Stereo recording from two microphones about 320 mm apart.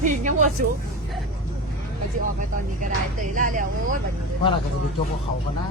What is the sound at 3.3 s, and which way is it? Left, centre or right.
Speech, right.